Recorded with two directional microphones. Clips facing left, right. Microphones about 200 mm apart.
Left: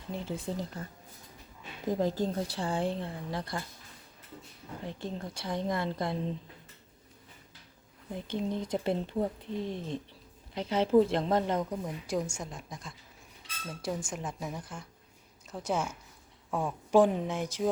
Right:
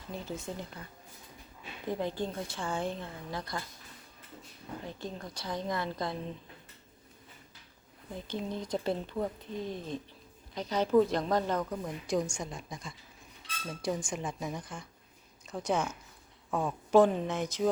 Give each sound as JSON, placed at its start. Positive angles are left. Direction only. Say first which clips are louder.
{"t": 0.1, "sound": "a woman's voice", "louder": "left 3 dB", "side_deg": 30}
{"t": 1.9, "sound": "a woman's voice", "louder": "left 4 dB", "side_deg": 40}
{"t": 4.9, "sound": "speech", "louder": "left 5 dB", "side_deg": 25}
{"t": 8.5, "sound": "speech", "louder": "even", "side_deg": 25}
{"t": 12.0, "sound": "speech", "louder": "right 4 dB", "side_deg": 5}